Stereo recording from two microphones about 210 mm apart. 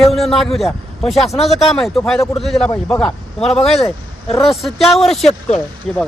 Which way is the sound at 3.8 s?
20° left (ahead or behind).